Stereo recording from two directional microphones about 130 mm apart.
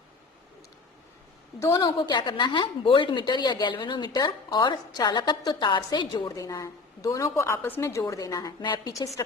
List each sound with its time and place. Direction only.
1.5 s a woman's voice: 20° left (ahead or behind)
1.8 s a woman's voice: 35° left (ahead or behind)